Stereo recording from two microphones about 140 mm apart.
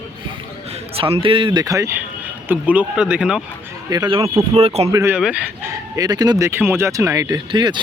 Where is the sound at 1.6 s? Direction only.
25° right (ahead or behind).